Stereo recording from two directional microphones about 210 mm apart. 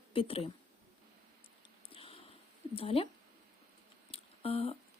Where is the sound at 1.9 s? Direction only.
25° left (ahead or behind).